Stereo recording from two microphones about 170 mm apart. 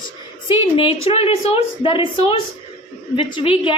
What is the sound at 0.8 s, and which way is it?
A woman's voice, 35° left (ahead or behind).